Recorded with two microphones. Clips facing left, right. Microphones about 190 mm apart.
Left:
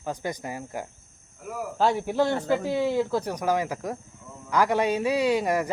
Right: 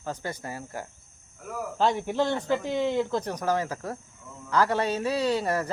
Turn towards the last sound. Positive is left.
turn(degrees=15)  # may be behind; listen again after turning